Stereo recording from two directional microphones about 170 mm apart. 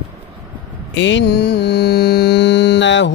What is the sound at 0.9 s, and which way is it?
Mantra, 90° left.